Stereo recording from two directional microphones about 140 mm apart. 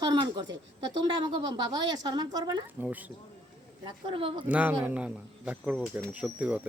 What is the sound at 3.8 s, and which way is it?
Speech, 35° right (ahead or behind).